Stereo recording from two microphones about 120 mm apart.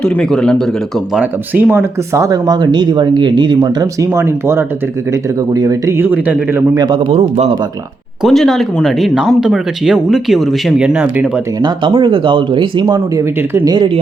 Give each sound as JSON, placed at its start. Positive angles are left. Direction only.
{"t": 0.0, "sound": "speech", "side_deg": 5}
{"t": 1.1, "sound": "speech", "side_deg": -10}
{"t": 6.0, "sound": "a man's voice", "side_deg": -15}
{"t": 6.9, "sound": "a man's voice", "side_deg": -65}
{"t": 8.2, "sound": "speech", "side_deg": 0}
{"t": 11.6, "sound": "speech", "side_deg": -45}
{"t": 13.1, "sound": "speech", "side_deg": -20}
{"t": 13.7, "sound": "speech", "side_deg": -40}